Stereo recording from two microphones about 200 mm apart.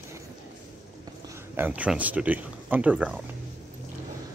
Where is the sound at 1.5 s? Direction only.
10° right (ahead or behind).